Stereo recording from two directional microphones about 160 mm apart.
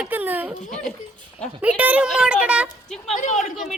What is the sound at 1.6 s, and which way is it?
A woman's voice, 10° right (ahead or behind).